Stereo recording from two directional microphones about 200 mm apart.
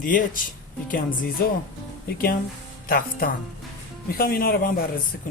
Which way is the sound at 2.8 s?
45° left (ahead or behind).